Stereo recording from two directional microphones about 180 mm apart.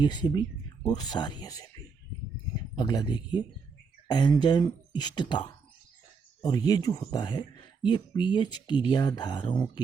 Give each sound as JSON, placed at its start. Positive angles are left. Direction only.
{"t": 0.0, "sound": "speech", "side_deg": 25}
{"t": 6.4, "sound": "speech", "side_deg": 20}